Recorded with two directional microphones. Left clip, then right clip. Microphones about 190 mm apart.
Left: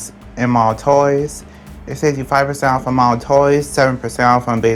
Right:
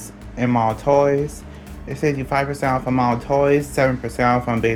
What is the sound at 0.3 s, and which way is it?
Speech, 25° left (ahead or behind).